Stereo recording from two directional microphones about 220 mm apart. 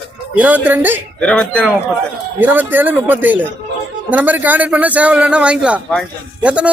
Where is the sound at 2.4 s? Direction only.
10° right (ahead or behind).